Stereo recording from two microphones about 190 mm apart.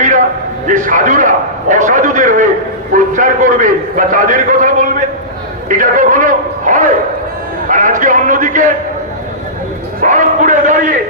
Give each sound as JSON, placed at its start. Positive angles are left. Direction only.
{"t": 0.0, "sound": "a sound", "side_deg": -40}
{"t": 0.7, "sound": "a man's voice", "side_deg": -45}
{"t": 10.0, "sound": "a man's voice", "side_deg": -40}